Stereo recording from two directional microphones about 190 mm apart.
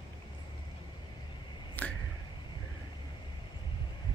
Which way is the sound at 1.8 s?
10° left (ahead or behind).